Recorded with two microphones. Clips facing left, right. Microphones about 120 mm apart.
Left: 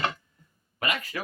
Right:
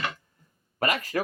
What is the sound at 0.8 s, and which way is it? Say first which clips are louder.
Speech: right 5 dB; 40° right (ahead or behind).